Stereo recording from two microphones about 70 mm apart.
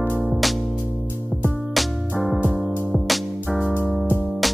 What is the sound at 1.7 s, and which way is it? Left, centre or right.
Music, centre.